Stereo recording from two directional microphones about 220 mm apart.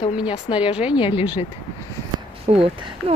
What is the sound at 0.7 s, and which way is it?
Speech, 5° right (ahead or behind).